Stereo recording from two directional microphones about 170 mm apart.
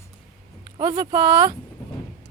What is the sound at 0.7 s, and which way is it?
Speech, 25° right (ahead or behind).